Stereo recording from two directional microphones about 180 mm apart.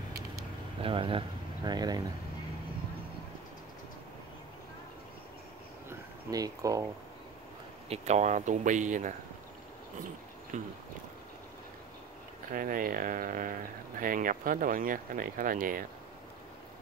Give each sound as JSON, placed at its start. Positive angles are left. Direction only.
{"t": 0.7, "sound": "speech", "side_deg": -30}
{"t": 5.9, "sound": "a sound", "side_deg": -20}
{"t": 7.9, "sound": "speech", "side_deg": -40}
{"t": 10.5, "sound": "speech", "side_deg": -40}
{"t": 12.5, "sound": "speech", "side_deg": -50}